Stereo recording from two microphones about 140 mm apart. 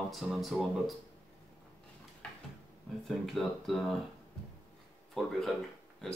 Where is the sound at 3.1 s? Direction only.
Centre (ahead or behind).